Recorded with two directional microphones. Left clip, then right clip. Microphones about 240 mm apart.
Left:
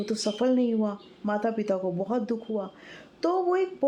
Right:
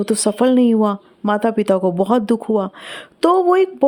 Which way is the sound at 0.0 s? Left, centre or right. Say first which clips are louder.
Right 11 dB; right.